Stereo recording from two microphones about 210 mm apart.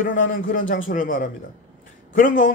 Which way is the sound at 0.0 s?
40° left (ahead or behind).